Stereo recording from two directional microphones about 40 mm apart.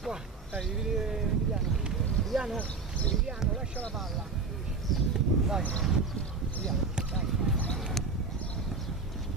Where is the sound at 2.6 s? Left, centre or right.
Left.